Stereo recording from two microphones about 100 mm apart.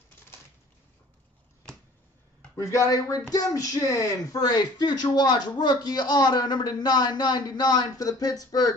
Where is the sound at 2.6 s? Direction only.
30° left (ahead or behind).